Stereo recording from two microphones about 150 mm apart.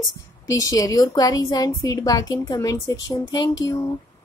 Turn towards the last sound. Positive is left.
turn(degrees=25)  # may be behind; listen again after turning